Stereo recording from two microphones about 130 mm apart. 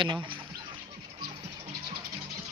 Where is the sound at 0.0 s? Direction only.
40° right (ahead or behind).